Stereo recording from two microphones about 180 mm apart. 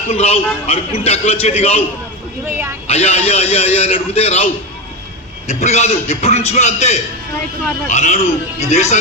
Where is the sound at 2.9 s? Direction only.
35° left (ahead or behind).